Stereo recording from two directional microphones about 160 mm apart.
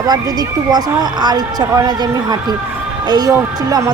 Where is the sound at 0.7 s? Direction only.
25° right (ahead or behind).